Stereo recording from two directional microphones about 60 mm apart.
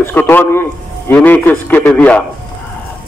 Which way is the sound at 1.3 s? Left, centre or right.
Left.